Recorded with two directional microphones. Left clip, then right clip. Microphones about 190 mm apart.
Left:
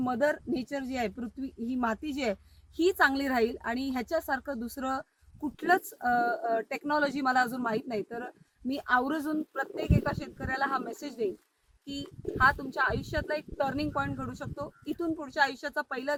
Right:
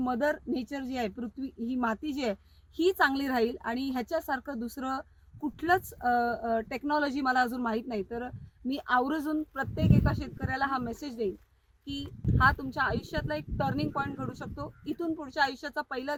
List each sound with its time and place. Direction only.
0.0 s speech: 25° left (ahead or behind)